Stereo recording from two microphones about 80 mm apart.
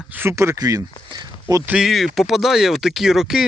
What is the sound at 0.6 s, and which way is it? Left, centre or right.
Speech, right.